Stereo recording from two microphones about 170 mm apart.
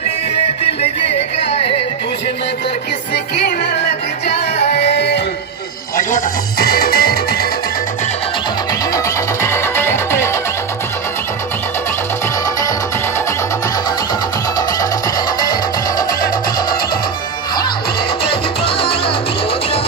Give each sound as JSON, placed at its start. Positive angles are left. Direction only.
{"t": 1.0, "sound": "music", "side_deg": 35}
{"t": 3.3, "sound": "music", "side_deg": 80}
{"t": 5.9, "sound": "music", "side_deg": 55}
{"t": 8.9, "sound": "music", "side_deg": 15}
{"t": 14.7, "sound": "music", "side_deg": 20}
{"t": 18.7, "sound": "music", "side_deg": 35}